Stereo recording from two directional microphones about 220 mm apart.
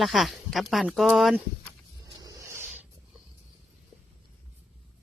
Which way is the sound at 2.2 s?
15° right (ahead or behind).